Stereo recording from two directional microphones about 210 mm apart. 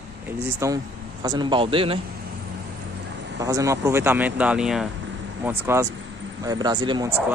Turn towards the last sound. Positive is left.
turn(degrees=-20)  # may be behind; listen again after turning